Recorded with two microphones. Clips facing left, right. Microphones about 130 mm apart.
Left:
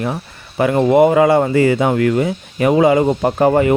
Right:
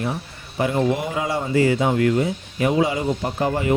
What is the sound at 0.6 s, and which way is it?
Speech, 80° left.